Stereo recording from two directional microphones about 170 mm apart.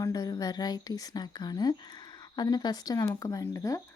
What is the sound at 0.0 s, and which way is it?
A woman's voice, 20° left (ahead or behind).